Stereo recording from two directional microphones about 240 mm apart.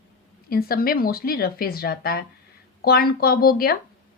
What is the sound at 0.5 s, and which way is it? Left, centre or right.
Speech, left.